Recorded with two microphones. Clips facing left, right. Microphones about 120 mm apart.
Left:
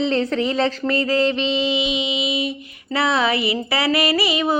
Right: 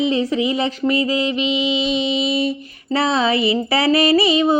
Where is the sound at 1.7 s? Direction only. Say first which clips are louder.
Right 3 dB; 35° right (ahead or behind).